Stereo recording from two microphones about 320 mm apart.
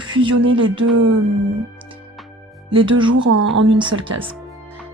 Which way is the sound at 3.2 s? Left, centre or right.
Right.